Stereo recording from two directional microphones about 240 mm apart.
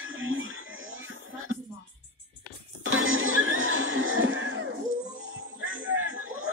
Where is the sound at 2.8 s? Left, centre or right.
Right.